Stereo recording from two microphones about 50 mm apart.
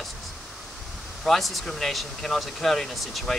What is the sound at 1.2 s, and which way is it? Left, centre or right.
Speech, centre.